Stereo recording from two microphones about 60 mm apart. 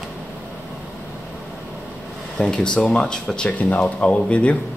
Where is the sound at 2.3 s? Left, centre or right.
Centre.